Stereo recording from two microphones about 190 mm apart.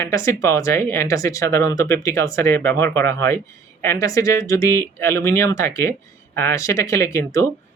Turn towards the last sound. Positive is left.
turn(degrees=15)  # may be behind; listen again after turning